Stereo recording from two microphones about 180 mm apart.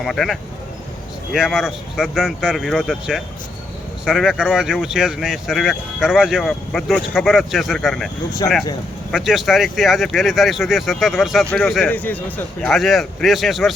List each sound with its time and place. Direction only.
0.0 s speech: centre (ahead or behind)
8.4 s speech: 25° left (ahead or behind)
9.1 s speech: centre (ahead or behind)